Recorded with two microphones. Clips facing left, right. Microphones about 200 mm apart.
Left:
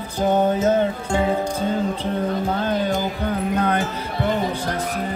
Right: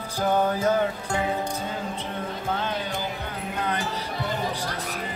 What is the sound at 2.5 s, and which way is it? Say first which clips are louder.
Music: left 7 dB; 40° left (ahead or behind).